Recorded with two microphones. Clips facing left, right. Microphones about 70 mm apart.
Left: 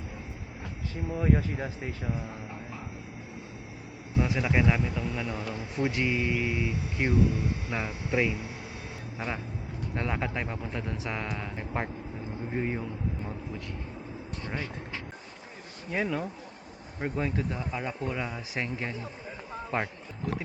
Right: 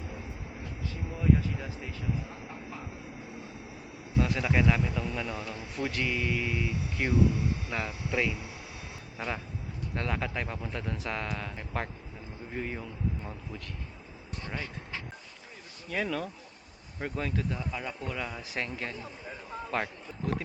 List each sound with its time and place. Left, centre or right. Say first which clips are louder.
1.1 s speech: left 1 dB; left
4.2 s speech: left 1 dB; centre
5.5 s a man's voice: left 5 dB; centre
15.9 s a man's voice: left 2 dB; centre